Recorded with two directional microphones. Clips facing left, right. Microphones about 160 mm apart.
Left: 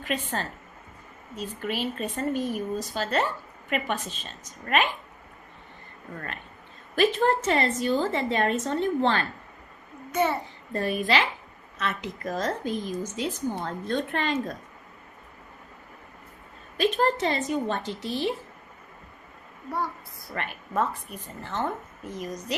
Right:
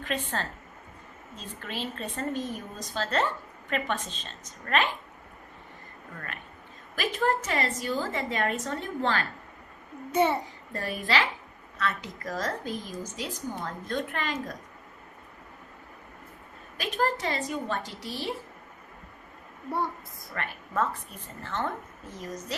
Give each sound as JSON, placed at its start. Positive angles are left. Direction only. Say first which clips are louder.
{"t": 0.0, "sound": "speech", "louder": "left 2 dB", "side_deg": 15}
{"t": 6.1, "sound": "a woman's voice", "louder": "left 3 dB", "side_deg": 30}
{"t": 10.1, "sound": "a child's voice", "louder": "right 1 dB", "side_deg": -30}
{"t": 10.7, "sound": "a woman's voice", "louder": "left 4 dB", "side_deg": 25}
{"t": 16.7, "sound": "a woman's voice", "louder": "left 5 dB", "side_deg": 25}
{"t": 20.3, "sound": "a woman's voice", "louder": "left 2 dB", "side_deg": 20}